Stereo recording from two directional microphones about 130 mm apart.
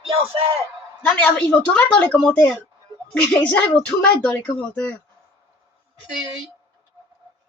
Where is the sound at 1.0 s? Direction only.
10° left (ahead or behind).